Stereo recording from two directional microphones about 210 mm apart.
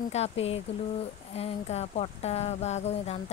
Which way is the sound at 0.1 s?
30° left (ahead or behind).